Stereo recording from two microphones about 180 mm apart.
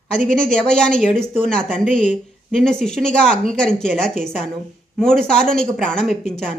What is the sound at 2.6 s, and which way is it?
Speech, 5° left (ahead or behind).